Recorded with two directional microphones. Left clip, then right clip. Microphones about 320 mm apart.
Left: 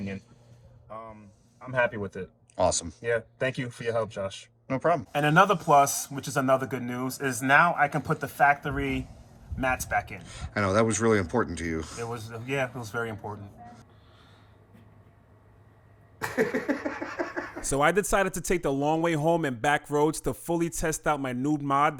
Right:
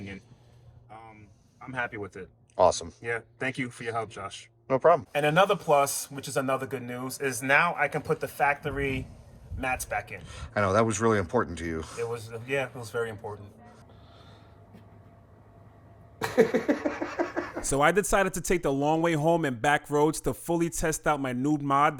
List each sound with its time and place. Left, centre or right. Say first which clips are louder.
2.6 s speech: right 3 dB; centre
3.5 s a man's voice: left 2 dB; left
4.7 s speech: right 4 dB; centre
5.1 s a man's voice: left 1 dB; left
10.2 s speech: right 1 dB; centre
12.1 s a man's voice: left 1 dB; left
16.1 s a sound: right 2 dB; centre
16.8 s speech: right 2 dB; centre